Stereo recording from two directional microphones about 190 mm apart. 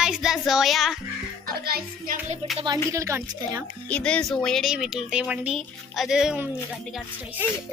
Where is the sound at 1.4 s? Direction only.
50° right (ahead or behind).